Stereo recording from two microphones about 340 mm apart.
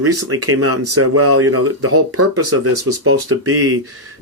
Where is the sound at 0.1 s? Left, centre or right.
Right.